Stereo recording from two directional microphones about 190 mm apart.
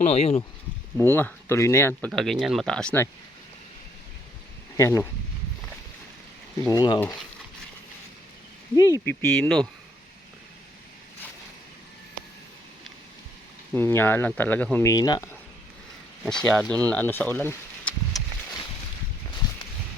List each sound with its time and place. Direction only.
0.0 s speech: 35° left (ahead or behind)
0.9 s speech: 10° left (ahead or behind)
4.8 s speech: 15° left (ahead or behind)
6.6 s speech: 20° left (ahead or behind)
8.7 s speech: 15° left (ahead or behind)
13.7 s speech: 10° left (ahead or behind)
16.2 s speech: 5° left (ahead or behind)
18.1 s a sound: centre (ahead or behind)